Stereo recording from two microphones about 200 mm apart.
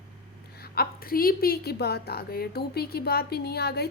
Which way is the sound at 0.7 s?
50° left (ahead or behind).